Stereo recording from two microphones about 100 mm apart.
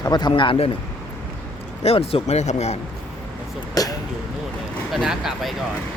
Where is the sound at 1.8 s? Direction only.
80° left.